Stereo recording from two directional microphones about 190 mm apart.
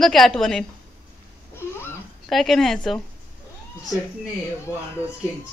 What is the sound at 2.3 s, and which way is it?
Speech, centre (ahead or behind).